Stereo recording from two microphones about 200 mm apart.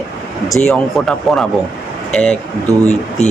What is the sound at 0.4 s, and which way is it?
Speech, centre (ahead or behind).